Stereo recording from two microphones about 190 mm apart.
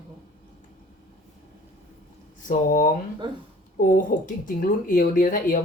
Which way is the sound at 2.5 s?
45° left (ahead or behind).